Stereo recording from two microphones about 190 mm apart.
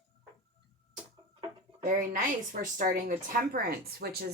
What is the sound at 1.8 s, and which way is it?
A woman's voice, 45° right (ahead or behind).